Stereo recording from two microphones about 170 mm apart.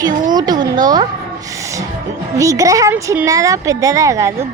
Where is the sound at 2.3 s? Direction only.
20° right (ahead or behind).